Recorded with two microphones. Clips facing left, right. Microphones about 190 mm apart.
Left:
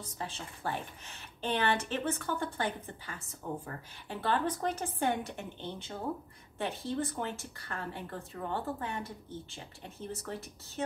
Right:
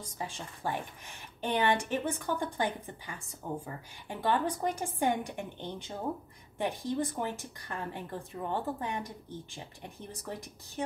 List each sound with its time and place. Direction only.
0.0 s a woman's voice: 10° right (ahead or behind)